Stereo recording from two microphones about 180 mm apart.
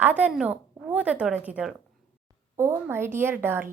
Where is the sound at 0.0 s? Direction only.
10° right (ahead or behind).